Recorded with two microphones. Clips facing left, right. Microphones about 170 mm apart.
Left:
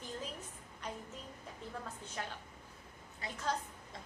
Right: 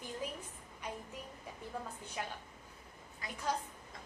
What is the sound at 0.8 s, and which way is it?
Speech, 10° right (ahead or behind).